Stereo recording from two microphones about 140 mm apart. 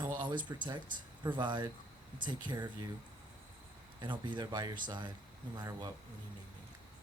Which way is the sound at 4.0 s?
35° right (ahead or behind).